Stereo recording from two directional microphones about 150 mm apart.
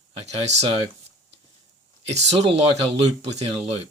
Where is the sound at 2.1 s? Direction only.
45° right (ahead or behind).